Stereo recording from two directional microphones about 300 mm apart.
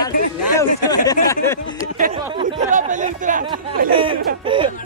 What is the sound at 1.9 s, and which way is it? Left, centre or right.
Chatter, right.